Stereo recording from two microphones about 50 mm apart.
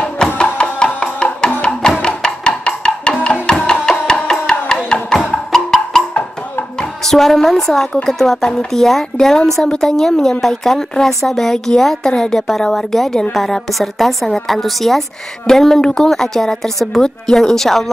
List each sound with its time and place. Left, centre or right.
0.4 s music: centre
6.8 s a woman's voice: centre